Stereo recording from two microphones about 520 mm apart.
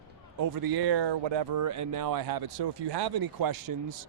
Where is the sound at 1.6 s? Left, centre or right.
Right.